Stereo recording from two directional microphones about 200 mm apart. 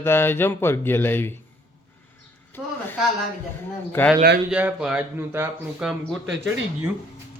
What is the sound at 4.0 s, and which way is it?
Speech, 10° left (ahead or behind).